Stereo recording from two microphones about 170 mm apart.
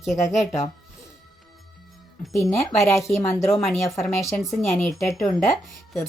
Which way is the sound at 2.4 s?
15° left (ahead or behind).